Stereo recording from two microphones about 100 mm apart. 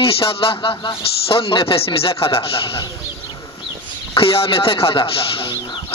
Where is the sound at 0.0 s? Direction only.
70° left (ahead or behind).